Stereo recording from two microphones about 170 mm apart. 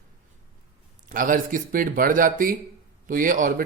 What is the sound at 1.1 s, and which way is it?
Speech, 50° right (ahead or behind).